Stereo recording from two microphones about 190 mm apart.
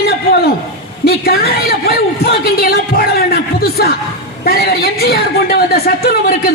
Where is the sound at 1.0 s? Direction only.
55° left (ahead or behind).